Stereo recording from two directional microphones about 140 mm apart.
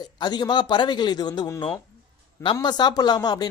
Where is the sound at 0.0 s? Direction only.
30° left (ahead or behind).